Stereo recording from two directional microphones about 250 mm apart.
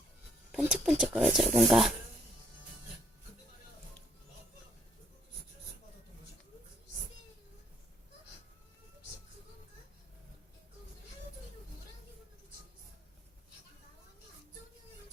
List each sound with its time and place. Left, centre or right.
0.5 s speech: centre